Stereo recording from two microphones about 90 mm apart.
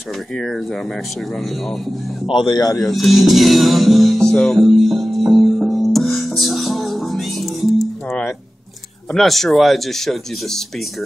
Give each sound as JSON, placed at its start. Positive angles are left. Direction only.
{"t": 2.2, "sound": "speech", "side_deg": 65}
{"t": 2.8, "sound": "music", "side_deg": 0}
{"t": 9.1, "sound": "speech", "side_deg": 5}